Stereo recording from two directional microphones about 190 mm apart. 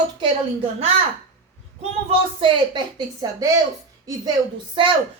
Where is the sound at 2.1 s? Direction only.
25° right (ahead or behind).